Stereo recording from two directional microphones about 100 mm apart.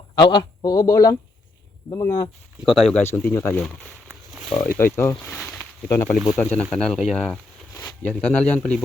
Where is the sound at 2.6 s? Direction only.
Centre (ahead or behind).